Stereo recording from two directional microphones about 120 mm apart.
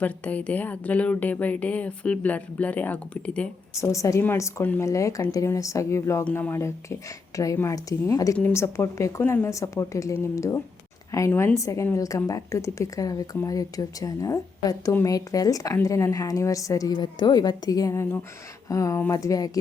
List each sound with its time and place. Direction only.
0.0 s speech: 10° left (ahead or behind)
3.8 s a woman's voice: 25° left (ahead or behind)